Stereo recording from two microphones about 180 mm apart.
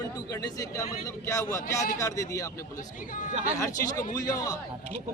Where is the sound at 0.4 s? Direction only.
20° left (ahead or behind).